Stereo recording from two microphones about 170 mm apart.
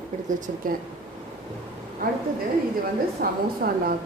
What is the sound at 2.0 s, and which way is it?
Speech, 55° right (ahead or behind).